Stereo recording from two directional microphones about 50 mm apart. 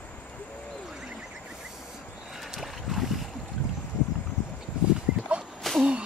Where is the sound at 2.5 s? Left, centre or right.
Centre.